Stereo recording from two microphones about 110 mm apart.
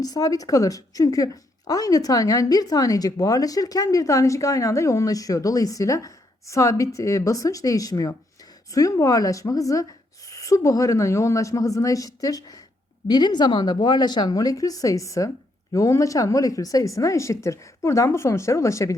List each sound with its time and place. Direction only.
0.0 s a woman's voice: 35° left (ahead or behind)